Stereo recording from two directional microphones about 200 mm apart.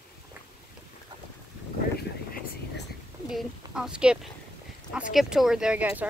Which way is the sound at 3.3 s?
5° right (ahead or behind).